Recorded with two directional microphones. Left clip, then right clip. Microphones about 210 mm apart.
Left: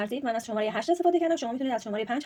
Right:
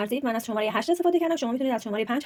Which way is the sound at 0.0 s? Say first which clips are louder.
Right 2 dB; 25° right (ahead or behind).